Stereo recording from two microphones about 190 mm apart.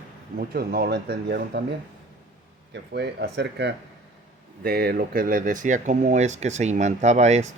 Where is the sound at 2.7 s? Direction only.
60° right (ahead or behind); by 7.5 s 35° right (ahead or behind).